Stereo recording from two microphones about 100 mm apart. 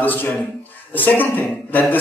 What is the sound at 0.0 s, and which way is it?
A man's voice, 20° left (ahead or behind).